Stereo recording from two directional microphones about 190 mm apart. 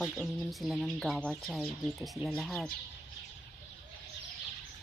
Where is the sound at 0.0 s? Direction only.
Centre (ahead or behind).